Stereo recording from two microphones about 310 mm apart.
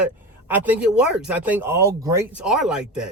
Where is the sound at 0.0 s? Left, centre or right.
Centre.